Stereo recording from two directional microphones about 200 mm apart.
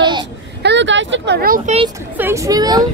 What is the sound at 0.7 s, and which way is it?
Speech, 65° right (ahead or behind).